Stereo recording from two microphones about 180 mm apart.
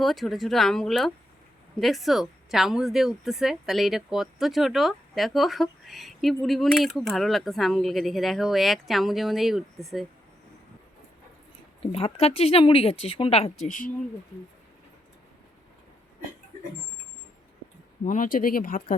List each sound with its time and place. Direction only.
0.0 s a woman's voice: centre (ahead or behind)
11.8 s speech: 35° left (ahead or behind)
13.7 s speech: 45° left (ahead or behind)
18.0 s speech: 45° left (ahead or behind)